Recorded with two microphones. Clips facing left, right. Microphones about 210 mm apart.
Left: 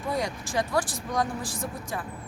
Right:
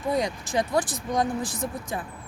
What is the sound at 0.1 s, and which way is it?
Speech, 20° right (ahead or behind).